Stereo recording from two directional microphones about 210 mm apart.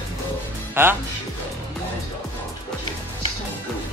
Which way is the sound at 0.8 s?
10° right (ahead or behind).